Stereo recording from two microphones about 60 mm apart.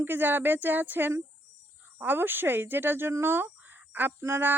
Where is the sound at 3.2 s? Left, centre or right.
Right.